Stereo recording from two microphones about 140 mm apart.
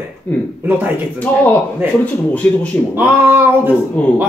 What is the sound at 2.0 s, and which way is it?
Speech, 10° left (ahead or behind).